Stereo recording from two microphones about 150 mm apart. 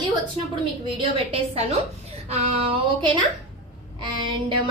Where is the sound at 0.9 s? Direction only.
35° right (ahead or behind).